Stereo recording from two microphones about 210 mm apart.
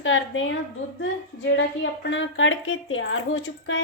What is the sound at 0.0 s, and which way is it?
A woman's voice, 65° left (ahead or behind).